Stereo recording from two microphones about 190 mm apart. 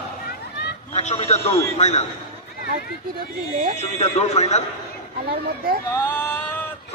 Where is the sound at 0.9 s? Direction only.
35° left (ahead or behind).